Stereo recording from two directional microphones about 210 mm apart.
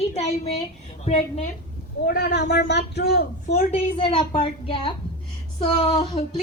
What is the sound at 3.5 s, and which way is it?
A woman's voice, 25° left (ahead or behind).